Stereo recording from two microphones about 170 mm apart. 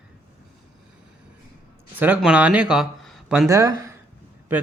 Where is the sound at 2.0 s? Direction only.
5° right (ahead or behind).